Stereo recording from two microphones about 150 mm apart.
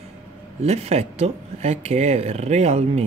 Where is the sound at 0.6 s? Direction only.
45° right (ahead or behind).